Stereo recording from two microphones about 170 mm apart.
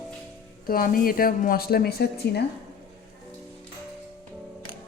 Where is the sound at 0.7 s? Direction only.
60° left (ahead or behind).